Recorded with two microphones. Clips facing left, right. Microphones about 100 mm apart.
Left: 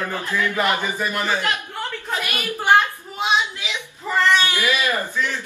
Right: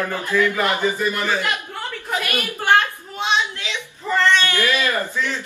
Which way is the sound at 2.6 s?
5° left (ahead or behind).